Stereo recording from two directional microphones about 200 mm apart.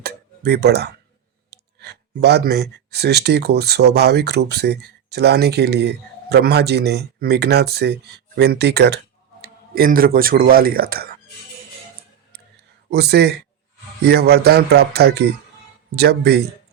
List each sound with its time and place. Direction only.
0.0 s a sound: 55° right (ahead or behind)
1.5 s speech: 55° right (ahead or behind)
12.9 s a man's voice: 55° right (ahead or behind)